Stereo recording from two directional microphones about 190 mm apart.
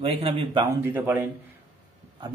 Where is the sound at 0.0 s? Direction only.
30° right (ahead or behind).